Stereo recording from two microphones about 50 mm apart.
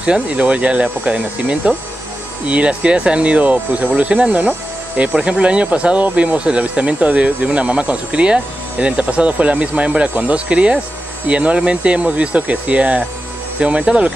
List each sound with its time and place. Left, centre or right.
0.0 s speech: right